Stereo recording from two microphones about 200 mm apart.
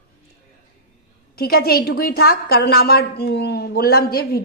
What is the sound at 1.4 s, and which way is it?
A woman's voice, 50° left (ahead or behind).